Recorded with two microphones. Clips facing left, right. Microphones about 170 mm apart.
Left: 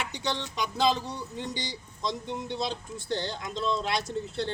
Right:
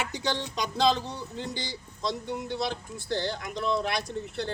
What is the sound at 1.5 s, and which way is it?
Speech, 20° left (ahead or behind).